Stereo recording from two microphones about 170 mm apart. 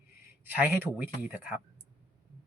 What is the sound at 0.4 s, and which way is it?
A man's voice, 10° right (ahead or behind).